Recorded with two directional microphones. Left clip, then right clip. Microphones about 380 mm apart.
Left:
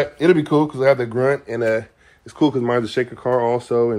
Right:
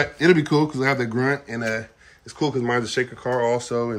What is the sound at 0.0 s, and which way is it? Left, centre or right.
Speech, centre.